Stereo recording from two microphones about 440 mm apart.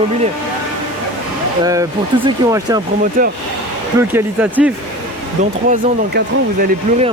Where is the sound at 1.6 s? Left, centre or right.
Centre.